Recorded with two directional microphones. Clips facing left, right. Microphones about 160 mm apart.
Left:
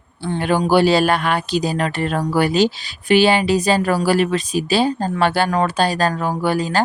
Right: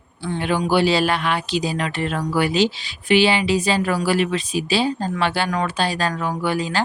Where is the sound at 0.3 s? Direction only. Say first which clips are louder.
Left 4 dB; 40° left (ahead or behind).